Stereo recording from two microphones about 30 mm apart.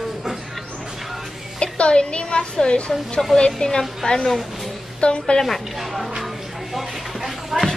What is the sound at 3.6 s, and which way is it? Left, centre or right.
A woman's voice, left.